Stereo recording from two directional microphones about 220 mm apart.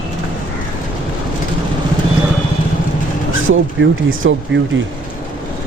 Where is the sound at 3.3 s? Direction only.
65° right (ahead or behind).